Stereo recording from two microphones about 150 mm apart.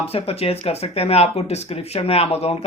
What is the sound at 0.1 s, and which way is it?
A man's voice, 40° left (ahead or behind).